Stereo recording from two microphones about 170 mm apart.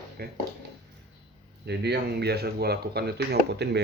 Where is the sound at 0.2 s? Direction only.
65° right (ahead or behind).